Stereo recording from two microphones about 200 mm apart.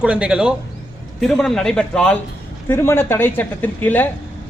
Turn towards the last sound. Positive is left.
turn(degrees=10)  # may be behind; listen again after turning